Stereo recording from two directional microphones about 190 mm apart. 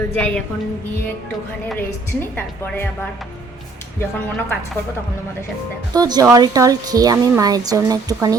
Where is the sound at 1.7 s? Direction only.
10° left (ahead or behind).